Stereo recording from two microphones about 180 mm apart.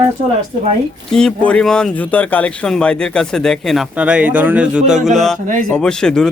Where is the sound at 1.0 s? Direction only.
5° left (ahead or behind).